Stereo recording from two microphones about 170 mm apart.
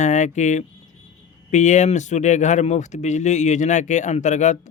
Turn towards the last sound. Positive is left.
turn(degrees=45)  # may be behind; listen again after turning